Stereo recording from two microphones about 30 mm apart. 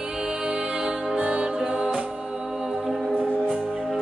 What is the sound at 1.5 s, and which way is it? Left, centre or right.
Music, right.